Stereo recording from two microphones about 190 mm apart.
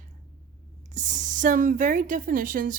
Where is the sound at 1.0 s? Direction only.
40° right (ahead or behind).